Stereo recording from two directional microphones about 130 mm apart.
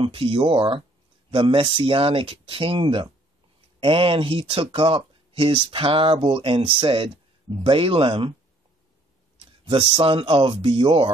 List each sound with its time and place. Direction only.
0.0 s speech: 45° right (ahead or behind)
9.4 s speech: 45° right (ahead or behind)